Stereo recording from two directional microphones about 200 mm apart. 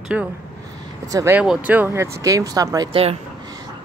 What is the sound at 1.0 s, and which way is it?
Speech, 15° right (ahead or behind).